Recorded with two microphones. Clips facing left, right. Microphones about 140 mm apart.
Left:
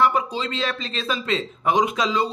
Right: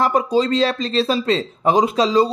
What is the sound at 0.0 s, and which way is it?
Speech, 40° right (ahead or behind).